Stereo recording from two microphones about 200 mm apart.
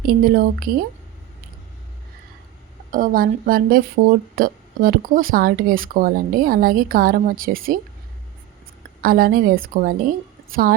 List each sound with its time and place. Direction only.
0.0 s speech: 50° right (ahead or behind)
2.9 s speech: 45° right (ahead or behind)
9.0 s speech: 50° right (ahead or behind)